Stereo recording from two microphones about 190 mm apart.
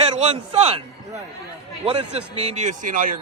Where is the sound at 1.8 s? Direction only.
30° right (ahead or behind).